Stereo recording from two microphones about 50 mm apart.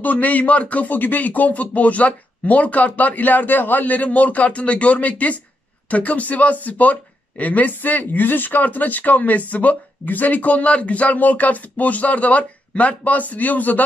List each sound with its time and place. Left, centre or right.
0.0 s speech: left